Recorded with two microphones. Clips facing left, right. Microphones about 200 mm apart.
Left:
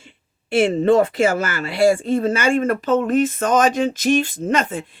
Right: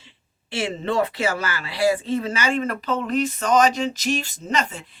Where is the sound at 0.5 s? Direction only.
50° left (ahead or behind).